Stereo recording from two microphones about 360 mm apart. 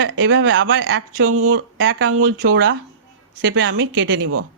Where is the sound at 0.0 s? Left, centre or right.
Right.